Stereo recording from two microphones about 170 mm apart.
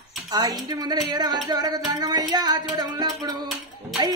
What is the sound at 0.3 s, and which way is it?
Speech, 25° right (ahead or behind).